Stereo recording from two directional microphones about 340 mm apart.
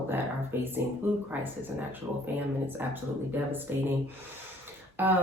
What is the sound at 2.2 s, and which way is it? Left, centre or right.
Speech, centre.